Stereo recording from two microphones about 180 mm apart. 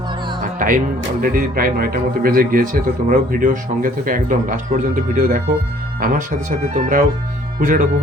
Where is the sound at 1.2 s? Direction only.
50° right (ahead or behind).